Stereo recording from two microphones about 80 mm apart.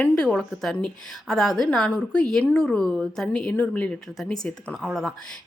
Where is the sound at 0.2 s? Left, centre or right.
Centre.